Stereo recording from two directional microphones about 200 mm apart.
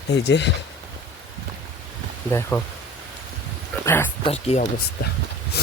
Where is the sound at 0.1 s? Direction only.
60° left (ahead or behind).